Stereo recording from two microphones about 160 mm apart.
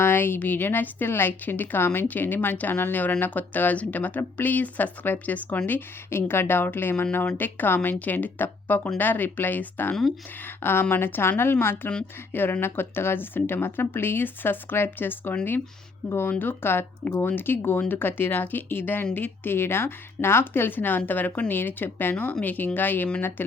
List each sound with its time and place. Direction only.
0.0 s a woman's voice: 15° left (ahead or behind)